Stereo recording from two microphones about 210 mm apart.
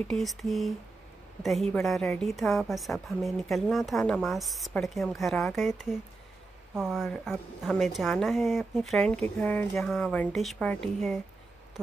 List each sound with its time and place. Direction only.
0.1 s a woman's voice: centre (ahead or behind)